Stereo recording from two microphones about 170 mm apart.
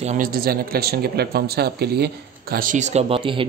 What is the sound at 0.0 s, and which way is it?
Speech, 50° right (ahead or behind).